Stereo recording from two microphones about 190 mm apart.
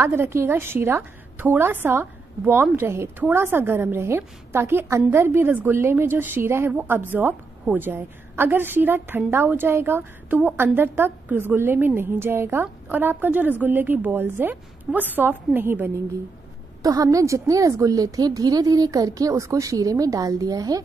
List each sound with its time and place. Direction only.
0.0 s a woman's voice: 15° right (ahead or behind)